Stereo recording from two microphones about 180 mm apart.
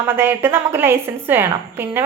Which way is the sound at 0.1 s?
10° right (ahead or behind).